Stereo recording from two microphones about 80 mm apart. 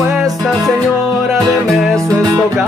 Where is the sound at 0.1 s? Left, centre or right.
Centre.